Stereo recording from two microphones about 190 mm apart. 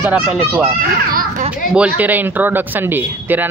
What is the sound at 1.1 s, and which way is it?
Speech, 50° right (ahead or behind).